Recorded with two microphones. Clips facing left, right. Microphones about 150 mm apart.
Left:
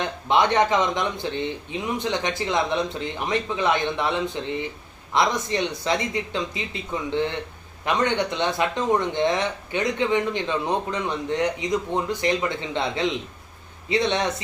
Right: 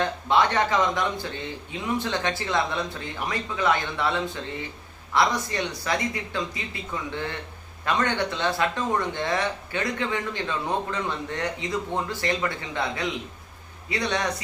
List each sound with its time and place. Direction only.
0.0 s speech: 20° left (ahead or behind)